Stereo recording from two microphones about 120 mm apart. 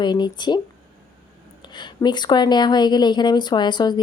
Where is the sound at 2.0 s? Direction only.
35° left (ahead or behind).